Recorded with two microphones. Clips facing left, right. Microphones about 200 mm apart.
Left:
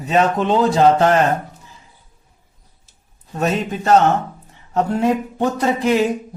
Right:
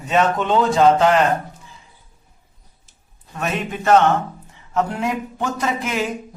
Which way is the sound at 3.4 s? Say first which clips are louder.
Left 4 dB; 35° left (ahead or behind).